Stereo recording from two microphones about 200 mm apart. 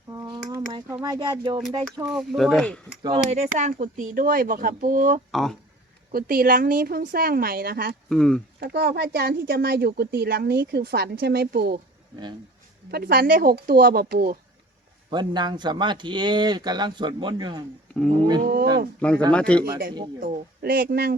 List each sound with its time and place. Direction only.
0.1 s a sound: 15° right (ahead or behind)
0.7 s speech: 20° right (ahead or behind)
2.0 s speech: centre (ahead or behind)
3.0 s speech: 30° right (ahead or behind)
5.3 s speech: centre (ahead or behind)
6.1 s speech: 45° right (ahead or behind)
8.1 s speech: 5° left (ahead or behind)
8.6 s speech: 50° right (ahead or behind)
12.9 s speech: 50° right (ahead or behind)
15.1 s speech: 20° right (ahead or behind)
18.4 s speech: 50° right (ahead or behind)
18.9 s speech: 5° left (ahead or behind)
20.1 s speech: 45° right (ahead or behind)